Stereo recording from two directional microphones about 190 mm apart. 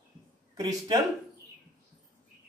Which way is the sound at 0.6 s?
20° right (ahead or behind).